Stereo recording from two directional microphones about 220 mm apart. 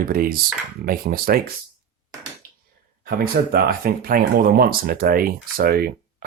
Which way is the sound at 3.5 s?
40° right (ahead or behind).